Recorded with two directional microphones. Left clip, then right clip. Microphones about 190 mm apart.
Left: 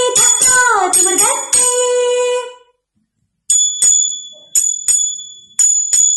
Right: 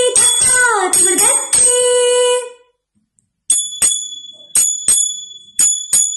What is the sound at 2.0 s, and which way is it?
Music, 30° right (ahead or behind).